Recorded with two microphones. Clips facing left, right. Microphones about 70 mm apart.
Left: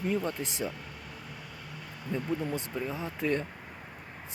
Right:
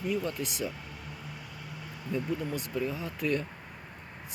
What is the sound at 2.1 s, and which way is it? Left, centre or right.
Speech, left.